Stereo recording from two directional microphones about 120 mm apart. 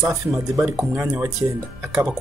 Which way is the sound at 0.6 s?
15° right (ahead or behind).